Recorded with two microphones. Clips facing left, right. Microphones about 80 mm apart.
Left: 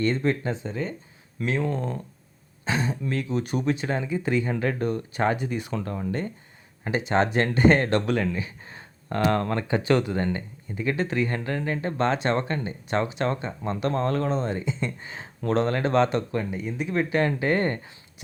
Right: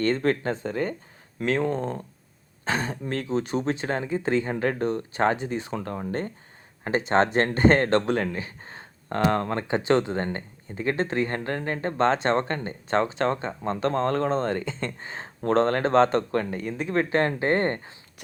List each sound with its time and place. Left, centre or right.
0.0 s speech: right
16.3 s speech: right
16.7 s speech: right